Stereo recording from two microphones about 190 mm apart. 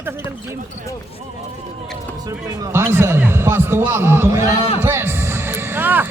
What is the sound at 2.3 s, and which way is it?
A man's voice, 20° right (ahead or behind).